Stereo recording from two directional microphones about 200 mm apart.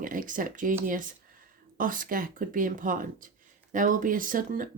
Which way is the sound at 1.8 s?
45° right (ahead or behind).